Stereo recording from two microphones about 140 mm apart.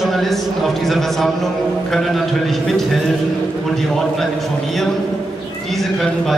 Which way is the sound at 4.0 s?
Centre (ahead or behind).